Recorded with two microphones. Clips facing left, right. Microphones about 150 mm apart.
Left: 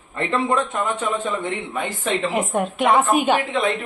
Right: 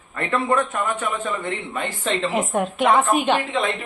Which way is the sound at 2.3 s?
Centre (ahead or behind).